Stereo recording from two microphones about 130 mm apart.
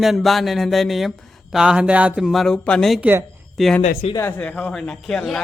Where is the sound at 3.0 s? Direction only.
15° right (ahead or behind).